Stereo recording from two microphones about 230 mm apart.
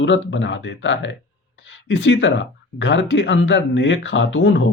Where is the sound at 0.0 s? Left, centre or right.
Left.